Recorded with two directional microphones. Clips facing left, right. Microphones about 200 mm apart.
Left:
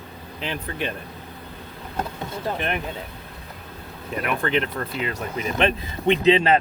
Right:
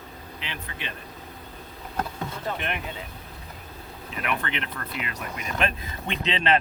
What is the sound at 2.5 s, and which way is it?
Speech, 35° left (ahead or behind).